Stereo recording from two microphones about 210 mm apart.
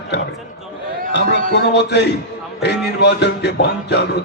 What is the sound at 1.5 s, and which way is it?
Speech, 55° left (ahead or behind).